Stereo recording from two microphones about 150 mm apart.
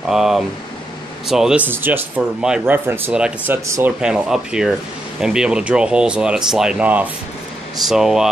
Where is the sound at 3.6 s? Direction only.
20° right (ahead or behind).